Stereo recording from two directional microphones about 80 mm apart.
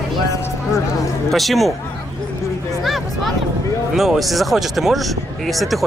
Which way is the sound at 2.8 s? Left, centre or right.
Centre.